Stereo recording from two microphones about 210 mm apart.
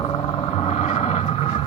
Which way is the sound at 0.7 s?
30° left (ahead or behind).